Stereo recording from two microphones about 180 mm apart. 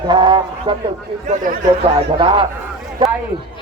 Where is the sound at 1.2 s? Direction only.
45° right (ahead or behind).